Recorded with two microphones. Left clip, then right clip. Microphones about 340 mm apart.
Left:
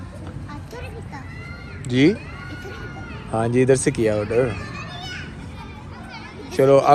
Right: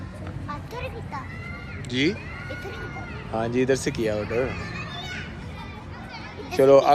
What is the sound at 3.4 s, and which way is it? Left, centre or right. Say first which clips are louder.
Speech: left 6 dB; centre.